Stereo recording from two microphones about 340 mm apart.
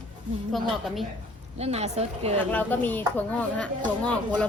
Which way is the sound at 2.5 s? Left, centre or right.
Centre.